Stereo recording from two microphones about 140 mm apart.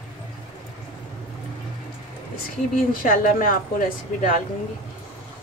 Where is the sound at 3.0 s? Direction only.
80° left.